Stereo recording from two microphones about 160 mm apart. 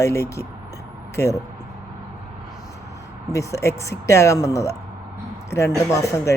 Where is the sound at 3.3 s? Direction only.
20° left (ahead or behind).